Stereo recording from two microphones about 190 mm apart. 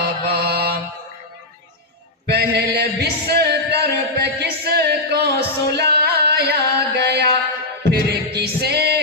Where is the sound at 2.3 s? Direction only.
55° right (ahead or behind).